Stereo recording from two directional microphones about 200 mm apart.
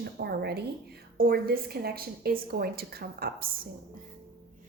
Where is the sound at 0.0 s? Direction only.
55° right (ahead or behind).